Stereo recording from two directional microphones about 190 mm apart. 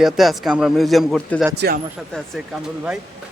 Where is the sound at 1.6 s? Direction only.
60° right (ahead or behind).